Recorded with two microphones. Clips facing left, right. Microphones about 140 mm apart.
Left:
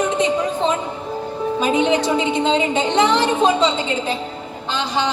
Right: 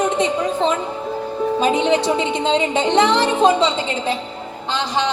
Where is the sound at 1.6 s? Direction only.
30° right (ahead or behind).